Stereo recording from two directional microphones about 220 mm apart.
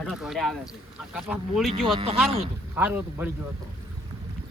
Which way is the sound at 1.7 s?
25° right (ahead or behind).